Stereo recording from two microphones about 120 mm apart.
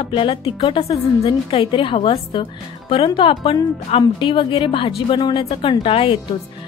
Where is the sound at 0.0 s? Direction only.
45° left (ahead or behind).